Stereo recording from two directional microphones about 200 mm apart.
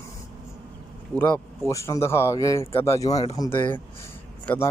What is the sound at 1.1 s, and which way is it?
Speech, 5° left (ahead or behind).